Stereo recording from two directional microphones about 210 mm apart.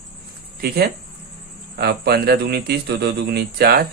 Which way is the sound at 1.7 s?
45° right (ahead or behind).